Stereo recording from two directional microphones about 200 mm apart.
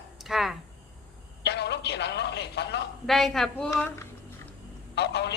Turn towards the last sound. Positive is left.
turn(degrees=55)  # may be behind; listen again after turning